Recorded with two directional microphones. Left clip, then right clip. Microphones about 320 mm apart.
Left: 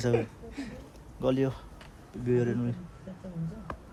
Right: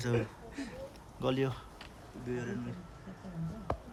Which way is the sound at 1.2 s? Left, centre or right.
Centre.